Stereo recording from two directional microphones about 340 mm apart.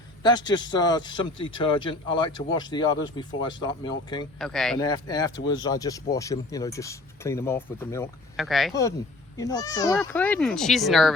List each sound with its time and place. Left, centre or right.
0.2 s a man's voice: centre
4.4 s a man's voice: centre